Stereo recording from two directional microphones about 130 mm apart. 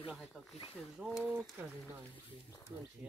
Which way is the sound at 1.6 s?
10° right (ahead or behind).